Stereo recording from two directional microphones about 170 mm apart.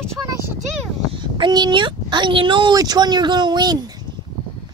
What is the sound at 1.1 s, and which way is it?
Speech, 25° right (ahead or behind).